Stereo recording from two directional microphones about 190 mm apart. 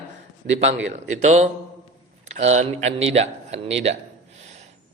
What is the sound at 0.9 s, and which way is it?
A man's voice, 35° right (ahead or behind).